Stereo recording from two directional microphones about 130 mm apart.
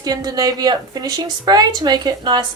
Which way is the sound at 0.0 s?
30° right (ahead or behind).